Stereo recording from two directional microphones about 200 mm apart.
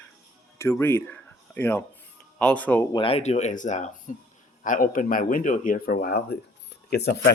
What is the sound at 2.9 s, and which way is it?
Speech, 30° left (ahead or behind).